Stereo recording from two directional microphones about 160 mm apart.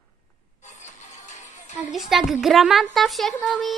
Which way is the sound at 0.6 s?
50° left (ahead or behind).